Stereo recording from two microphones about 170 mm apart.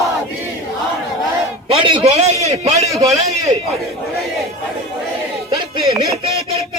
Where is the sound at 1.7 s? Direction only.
30° right (ahead or behind).